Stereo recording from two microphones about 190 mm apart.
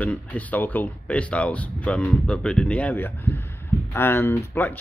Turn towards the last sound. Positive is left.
turn(degrees=10)  # may be behind; listen again after turning